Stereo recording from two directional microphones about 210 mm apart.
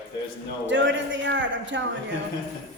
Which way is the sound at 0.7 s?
60° right (ahead or behind).